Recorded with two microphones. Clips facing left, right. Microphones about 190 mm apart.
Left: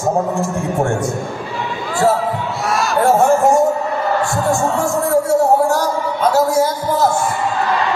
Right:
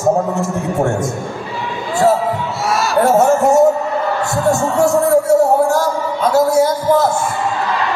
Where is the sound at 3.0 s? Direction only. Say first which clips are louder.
Right 1 dB; 45° right (ahead or behind).